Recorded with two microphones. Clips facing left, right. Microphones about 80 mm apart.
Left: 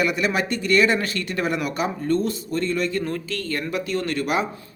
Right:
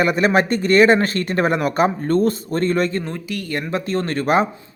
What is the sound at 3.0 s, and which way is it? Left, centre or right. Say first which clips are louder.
Speech: even; centre.